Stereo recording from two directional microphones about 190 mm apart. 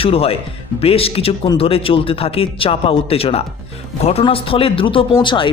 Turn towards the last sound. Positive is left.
turn(degrees=25)  # may be behind; listen again after turning